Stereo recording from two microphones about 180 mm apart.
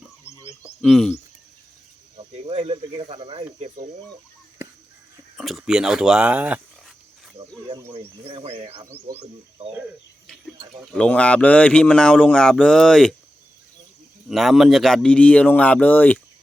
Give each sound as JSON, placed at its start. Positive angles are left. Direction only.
{"t": 0.3, "sound": "a sound", "side_deg": -30}
{"t": 0.8, "sound": "speech", "side_deg": 0}
{"t": 2.1, "sound": "speech", "side_deg": -30}
{"t": 5.4, "sound": "speech", "side_deg": 0}
{"t": 7.9, "sound": "speech", "side_deg": -30}
{"t": 8.9, "sound": "speech", "side_deg": -10}
{"t": 10.9, "sound": "speech", "side_deg": 5}
{"t": 14.3, "sound": "speech", "side_deg": 0}